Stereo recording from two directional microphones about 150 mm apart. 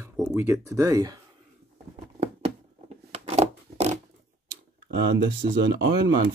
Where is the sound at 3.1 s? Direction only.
45° right (ahead or behind).